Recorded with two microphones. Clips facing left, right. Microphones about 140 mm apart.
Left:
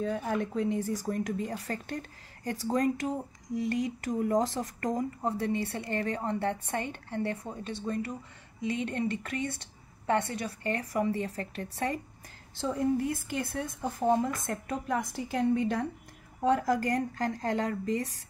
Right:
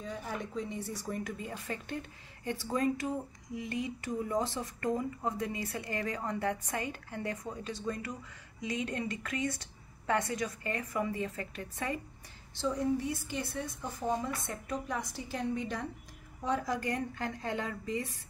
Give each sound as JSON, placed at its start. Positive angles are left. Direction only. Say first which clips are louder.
{"t": 0.0, "sound": "a woman's voice", "louder": "left 8 dB", "side_deg": 65}
{"t": 0.7, "sound": "speech", "louder": "left 8 dB", "side_deg": 90}
{"t": 1.0, "sound": "speech", "louder": "left 6 dB", "side_deg": 35}
{"t": 12.5, "sound": "a woman's voice", "louder": "left 3 dB", "side_deg": 50}